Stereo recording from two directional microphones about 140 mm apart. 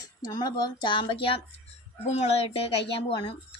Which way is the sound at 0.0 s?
30° left (ahead or behind).